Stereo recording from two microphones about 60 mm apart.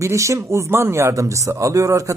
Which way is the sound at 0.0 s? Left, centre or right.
Right.